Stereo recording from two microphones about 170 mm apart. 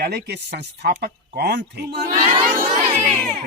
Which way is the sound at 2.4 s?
40° right (ahead or behind).